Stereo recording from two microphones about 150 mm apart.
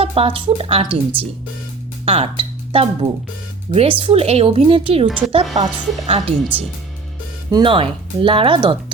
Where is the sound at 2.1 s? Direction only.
40° right (ahead or behind).